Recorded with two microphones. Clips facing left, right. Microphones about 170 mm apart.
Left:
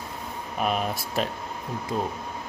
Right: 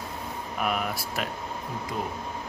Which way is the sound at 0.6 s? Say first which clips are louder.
Left 3 dB; 25° left (ahead or behind).